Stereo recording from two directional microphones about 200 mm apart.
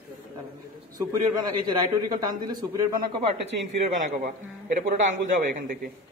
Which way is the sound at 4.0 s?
40° right (ahead or behind).